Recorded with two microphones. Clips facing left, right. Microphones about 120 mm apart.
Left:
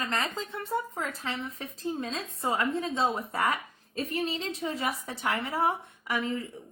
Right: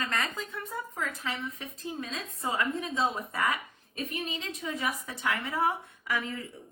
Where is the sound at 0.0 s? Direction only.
25° left (ahead or behind).